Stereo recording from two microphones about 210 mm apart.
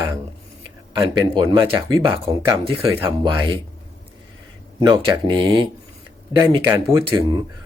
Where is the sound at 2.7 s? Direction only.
15° right (ahead or behind).